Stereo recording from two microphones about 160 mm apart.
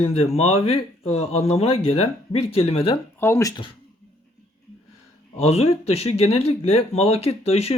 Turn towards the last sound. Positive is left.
turn(degrees=40)  # may be behind; listen again after turning